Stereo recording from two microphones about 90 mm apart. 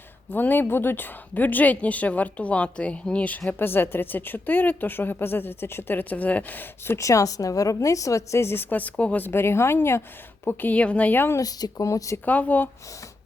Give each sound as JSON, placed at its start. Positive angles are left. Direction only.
{"t": 0.3, "sound": "a woman's voice", "side_deg": 20}
{"t": 11.3, "sound": "speech", "side_deg": 40}
{"t": 12.2, "sound": "a woman's voice", "side_deg": 20}